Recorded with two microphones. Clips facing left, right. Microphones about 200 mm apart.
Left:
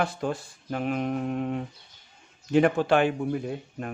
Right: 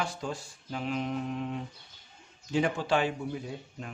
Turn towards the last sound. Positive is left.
turn(degrees=55)  # may be behind; listen again after turning